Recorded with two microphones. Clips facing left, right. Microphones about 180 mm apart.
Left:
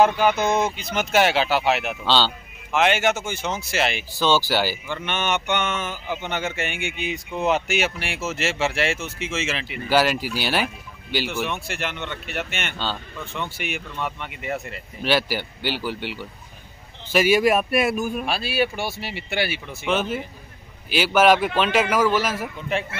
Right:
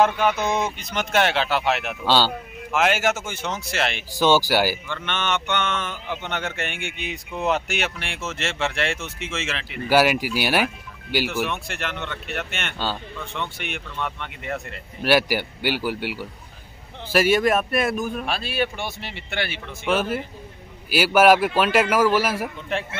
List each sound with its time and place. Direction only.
0.0 s speech: 5° left (ahead or behind)
2.0 s speech: 10° right (ahead or behind)
4.1 s a man's voice: 15° right (ahead or behind)
4.8 s speech: 10° left (ahead or behind)
9.8 s speech: 10° right (ahead or behind)
12.7 s a man's voice: 10° right (ahead or behind)
13.2 s speech: 5° left (ahead or behind)
15.0 s a man's voice: 10° right (ahead or behind)
17.1 s speech: 5° left (ahead or behind)
19.9 s a man's voice: 5° right (ahead or behind)